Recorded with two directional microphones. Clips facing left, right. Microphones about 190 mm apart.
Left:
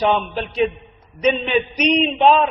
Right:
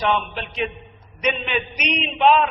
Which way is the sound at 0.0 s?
35° left (ahead or behind).